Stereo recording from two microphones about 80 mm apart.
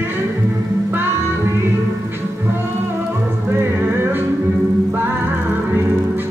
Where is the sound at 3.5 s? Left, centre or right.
Right.